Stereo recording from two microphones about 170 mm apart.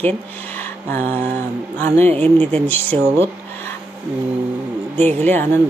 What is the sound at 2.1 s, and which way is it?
Speech, 35° right (ahead or behind).